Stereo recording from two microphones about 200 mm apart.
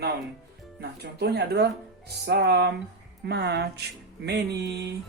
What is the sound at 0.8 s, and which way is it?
Speech, 55° right (ahead or behind).